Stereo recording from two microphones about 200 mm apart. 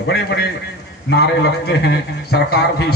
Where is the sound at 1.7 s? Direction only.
55° left (ahead or behind).